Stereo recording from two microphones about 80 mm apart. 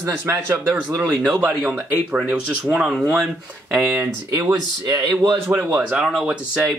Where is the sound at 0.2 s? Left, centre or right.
Right.